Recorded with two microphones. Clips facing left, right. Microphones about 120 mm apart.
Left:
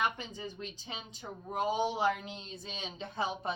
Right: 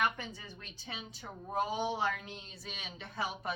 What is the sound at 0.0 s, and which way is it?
A woman's voice, 15° left (ahead or behind).